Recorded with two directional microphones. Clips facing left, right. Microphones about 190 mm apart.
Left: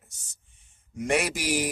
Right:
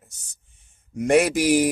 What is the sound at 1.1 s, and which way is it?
Speech, 45° right (ahead or behind).